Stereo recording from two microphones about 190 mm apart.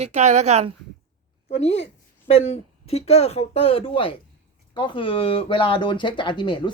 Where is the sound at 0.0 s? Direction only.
35° right (ahead or behind).